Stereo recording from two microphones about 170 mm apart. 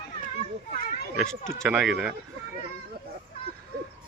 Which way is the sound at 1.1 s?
5° left (ahead or behind).